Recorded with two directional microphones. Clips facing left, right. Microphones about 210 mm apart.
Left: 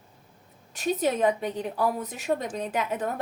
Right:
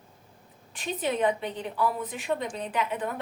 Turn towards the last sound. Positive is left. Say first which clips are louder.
# left 2 dB
turn(degrees=40)  # may be behind; listen again after turning